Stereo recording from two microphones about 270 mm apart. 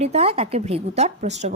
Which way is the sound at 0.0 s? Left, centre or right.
Right.